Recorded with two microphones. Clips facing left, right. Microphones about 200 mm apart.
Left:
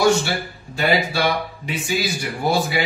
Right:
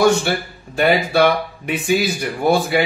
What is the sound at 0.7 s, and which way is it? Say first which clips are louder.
Speech: right 5 dB; 60° right (ahead or behind).